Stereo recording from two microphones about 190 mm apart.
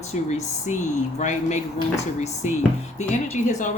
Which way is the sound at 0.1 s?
35° left (ahead or behind).